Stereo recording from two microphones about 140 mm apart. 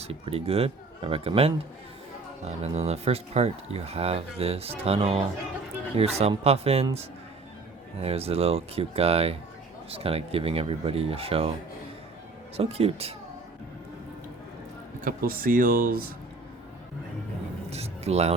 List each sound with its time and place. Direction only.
0.0 s speech: 45° right (ahead or behind)
8.0 s speech: 45° right (ahead or behind)
12.5 s speech: 45° right (ahead or behind)
15.0 s speech: 90° right
17.7 s speech: 50° right (ahead or behind)